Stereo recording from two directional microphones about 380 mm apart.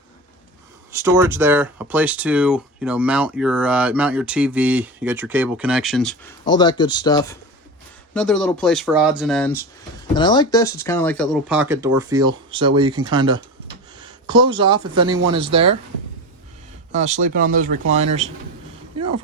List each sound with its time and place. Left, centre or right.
0.9 s speech: centre
12.6 s speech: right
12.9 s speech: centre
16.9 s speech: centre
18.9 s a sound: right